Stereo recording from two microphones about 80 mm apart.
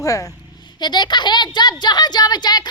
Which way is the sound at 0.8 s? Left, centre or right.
Left.